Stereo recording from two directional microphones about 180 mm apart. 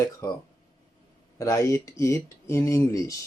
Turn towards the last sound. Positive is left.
turn(degrees=15)  # may be behind; listen again after turning